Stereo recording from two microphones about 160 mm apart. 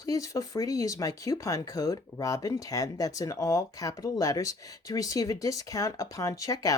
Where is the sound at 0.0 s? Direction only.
20° left (ahead or behind).